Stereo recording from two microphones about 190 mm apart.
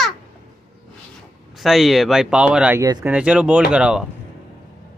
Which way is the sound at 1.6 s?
Centre (ahead or behind).